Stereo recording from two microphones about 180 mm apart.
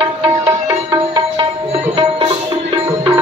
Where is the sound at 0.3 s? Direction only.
15° right (ahead or behind).